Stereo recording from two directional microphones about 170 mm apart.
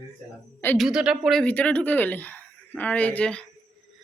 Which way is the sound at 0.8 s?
5° right (ahead or behind).